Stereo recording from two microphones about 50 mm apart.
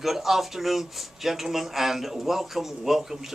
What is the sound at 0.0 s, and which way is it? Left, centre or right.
Speech, centre.